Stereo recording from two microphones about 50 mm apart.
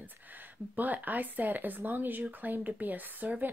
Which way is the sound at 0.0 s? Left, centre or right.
Right.